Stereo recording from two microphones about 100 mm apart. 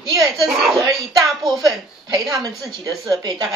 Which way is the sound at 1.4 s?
40° right (ahead or behind).